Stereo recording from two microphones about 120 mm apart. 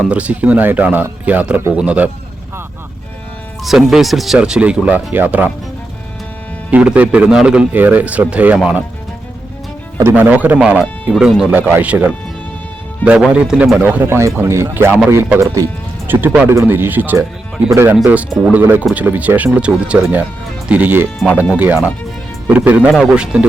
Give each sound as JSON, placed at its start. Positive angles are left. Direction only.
{"t": 0.0, "sound": "a man's voice", "side_deg": -10}
{"t": 3.6, "sound": "a man's voice", "side_deg": 0}
{"t": 6.7, "sound": "a man's voice", "side_deg": -10}
{"t": 10.0, "sound": "a man's voice", "side_deg": -15}
{"t": 11.5, "sound": "a man's voice", "side_deg": -15}
{"t": 18.5, "sound": "a man's voice", "side_deg": -15}